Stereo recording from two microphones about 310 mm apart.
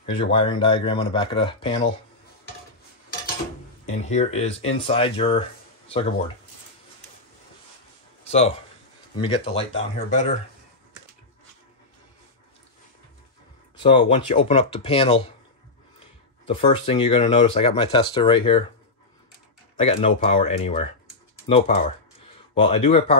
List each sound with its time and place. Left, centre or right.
0.0 s speech: centre
3.8 s speech: left
8.2 s speech: left
13.8 s speech: centre
16.4 s speech: centre
19.8 s speech: centre